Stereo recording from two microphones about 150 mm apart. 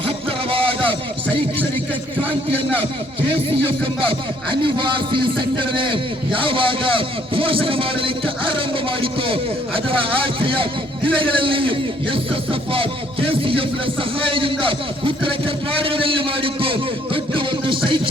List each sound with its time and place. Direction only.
0.5 s a sound: 35° right (ahead or behind)
3.2 s a man's voice: 40° right (ahead or behind)
17.3 s music: 35° right (ahead or behind)